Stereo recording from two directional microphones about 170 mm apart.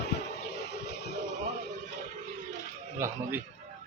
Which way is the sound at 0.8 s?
75° left (ahead or behind).